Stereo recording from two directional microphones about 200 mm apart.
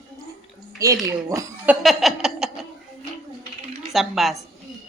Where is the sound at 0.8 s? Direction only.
15° right (ahead or behind); by 2.6 s centre (ahead or behind).